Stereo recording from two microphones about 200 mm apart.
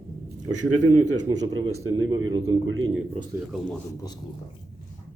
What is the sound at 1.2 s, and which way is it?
Speech, 20° right (ahead or behind).